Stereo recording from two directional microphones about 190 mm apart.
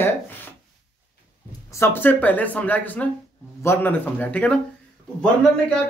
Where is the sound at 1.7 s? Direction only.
15° left (ahead or behind).